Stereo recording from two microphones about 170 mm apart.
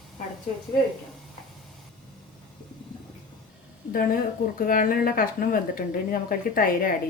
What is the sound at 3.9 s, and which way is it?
Speech, 55° left (ahead or behind).